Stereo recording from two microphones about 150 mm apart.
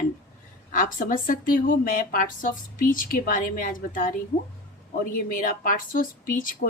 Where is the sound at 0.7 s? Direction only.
65° left (ahead or behind).